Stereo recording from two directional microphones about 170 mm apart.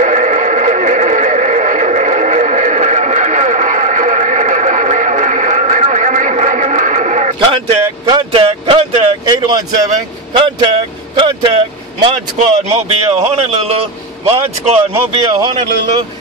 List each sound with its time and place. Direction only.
0.0 s neigh: 45° right (ahead or behind)
8.0 s a sound: 30° right (ahead or behind)
10.3 s speech: 30° right (ahead or behind)
15.3 s speech: 25° right (ahead or behind)